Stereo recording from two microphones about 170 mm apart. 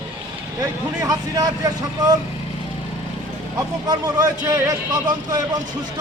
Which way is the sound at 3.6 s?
20° right (ahead or behind).